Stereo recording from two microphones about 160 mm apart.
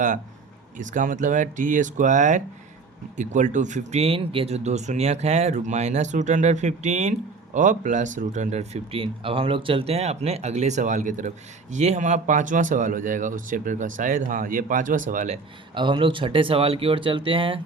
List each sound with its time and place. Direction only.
0.8 s speech: 50° right (ahead or behind)
15.7 s speech: 30° right (ahead or behind)